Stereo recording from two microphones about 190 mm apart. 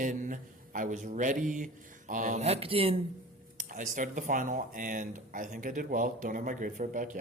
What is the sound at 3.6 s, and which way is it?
Speech, 45° right (ahead or behind).